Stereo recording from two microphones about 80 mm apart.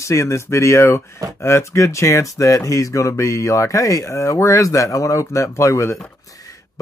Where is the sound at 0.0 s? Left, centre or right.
Left.